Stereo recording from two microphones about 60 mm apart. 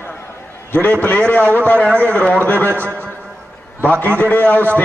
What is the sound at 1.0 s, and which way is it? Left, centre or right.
A man's voice, left.